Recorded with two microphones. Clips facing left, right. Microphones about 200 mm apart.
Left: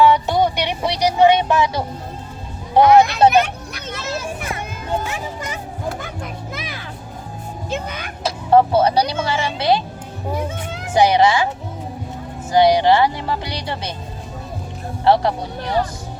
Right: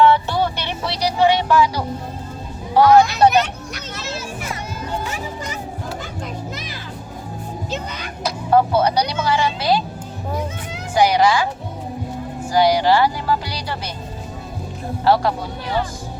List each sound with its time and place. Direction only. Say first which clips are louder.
0.0 s music: left 1 dB; 15° left (ahead or behind)
2.7 s speech: left 1 dB; 20° left (ahead or behind)
3.9 s children playing: left 4 dB; 55° left (ahead or behind)
6.0 s children playing: right 1 dB; 55° left (ahead or behind)
7.7 s music: left 4 dB; 55° left (ahead or behind)
8.2 s speech: left 2 dB; 30° left (ahead or behind)
10.9 s speech: left 1 dB; 25° left (ahead or behind)
12.5 s speech: left 2 dB; 20° left (ahead or behind)
15.0 s speech: left 1 dB; 25° left (ahead or behind)